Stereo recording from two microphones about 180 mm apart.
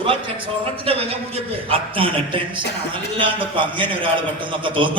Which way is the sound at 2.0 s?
30° right (ahead or behind).